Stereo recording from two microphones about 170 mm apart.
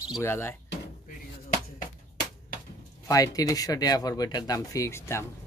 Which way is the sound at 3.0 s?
20° left (ahead or behind).